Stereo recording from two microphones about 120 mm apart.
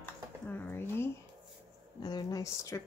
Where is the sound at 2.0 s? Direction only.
35° left (ahead or behind).